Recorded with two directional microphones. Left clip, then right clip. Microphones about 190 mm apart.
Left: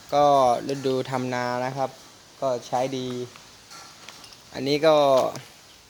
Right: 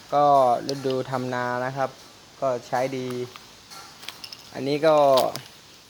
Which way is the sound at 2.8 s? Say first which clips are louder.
Even; 20° left (ahead or behind).